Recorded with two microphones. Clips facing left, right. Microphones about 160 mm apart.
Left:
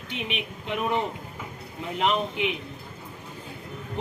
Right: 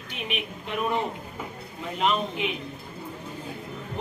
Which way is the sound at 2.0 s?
20° left (ahead or behind).